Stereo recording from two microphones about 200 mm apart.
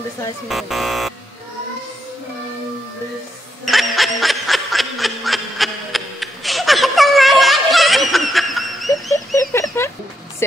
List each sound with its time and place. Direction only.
0.5 s speech: centre (ahead or behind)
3.6 s snicker: centre (ahead or behind)
9.1 s chicken: 15° left (ahead or behind)